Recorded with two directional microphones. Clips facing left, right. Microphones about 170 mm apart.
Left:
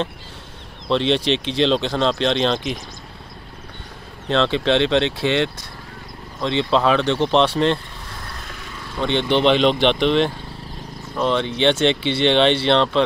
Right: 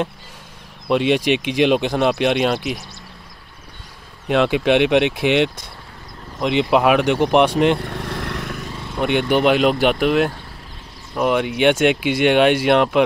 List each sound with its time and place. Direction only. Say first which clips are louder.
0.8 s speech: right 2 dB; 10° right (ahead or behind)
4.3 s speech: right 2 dB; 10° right (ahead or behind)
7.8 s vehicle: right 10 dB; 70° right (ahead or behind)
8.9 s speech: right 2 dB; 10° right (ahead or behind)